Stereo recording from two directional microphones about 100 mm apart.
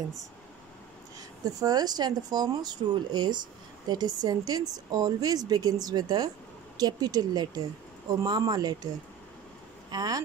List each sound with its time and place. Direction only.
1.4 s speech: 40° right (ahead or behind)
9.8 s speech: 40° right (ahead or behind)